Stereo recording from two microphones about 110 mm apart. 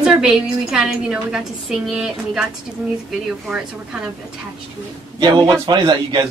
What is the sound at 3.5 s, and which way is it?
Speech, centre (ahead or behind).